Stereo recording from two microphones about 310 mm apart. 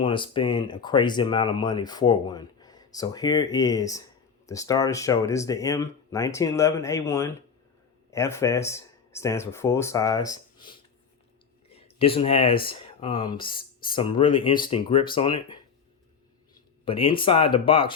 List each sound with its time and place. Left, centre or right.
0.0 s speech: centre
16.8 s speech: centre